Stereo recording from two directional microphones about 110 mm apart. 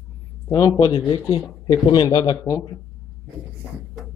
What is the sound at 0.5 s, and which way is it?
Speech, 30° left (ahead or behind).